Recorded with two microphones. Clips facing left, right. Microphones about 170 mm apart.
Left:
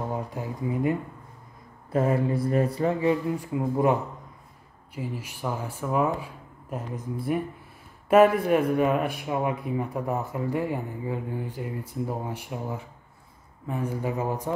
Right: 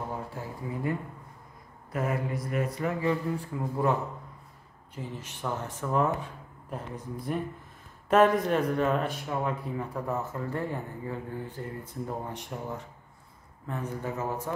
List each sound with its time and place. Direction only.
0.1 s speech: 15° left (ahead or behind)
1.9 s speech: 30° left (ahead or behind)